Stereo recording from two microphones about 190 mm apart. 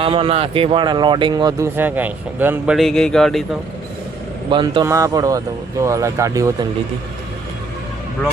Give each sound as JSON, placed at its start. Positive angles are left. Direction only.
{"t": 0.0, "sound": "speech", "side_deg": -30}
{"t": 2.7, "sound": "speech", "side_deg": 5}
{"t": 4.4, "sound": "speech", "side_deg": -25}